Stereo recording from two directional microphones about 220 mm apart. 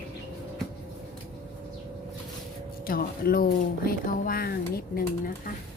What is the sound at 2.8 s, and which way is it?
Speech, 40° left (ahead or behind).